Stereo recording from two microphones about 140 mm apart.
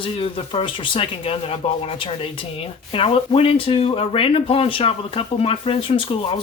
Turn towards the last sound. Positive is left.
turn(degrees=40)  # may be behind; listen again after turning